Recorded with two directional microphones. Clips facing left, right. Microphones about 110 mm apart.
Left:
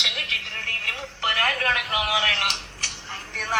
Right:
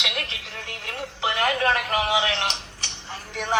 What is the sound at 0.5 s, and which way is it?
Telephone, 15° right (ahead or behind).